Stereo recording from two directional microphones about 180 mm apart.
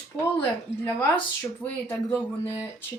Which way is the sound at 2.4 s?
20° left (ahead or behind).